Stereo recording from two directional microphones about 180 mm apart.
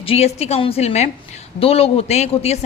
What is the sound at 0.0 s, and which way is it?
Speech, 35° left (ahead or behind).